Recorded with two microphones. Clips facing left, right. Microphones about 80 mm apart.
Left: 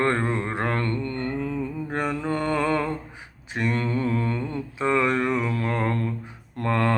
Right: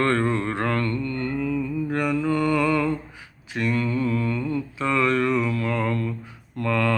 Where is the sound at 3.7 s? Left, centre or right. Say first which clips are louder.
Right 2 dB; left.